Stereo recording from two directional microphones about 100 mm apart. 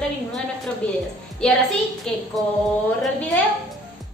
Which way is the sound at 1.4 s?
10° left (ahead or behind).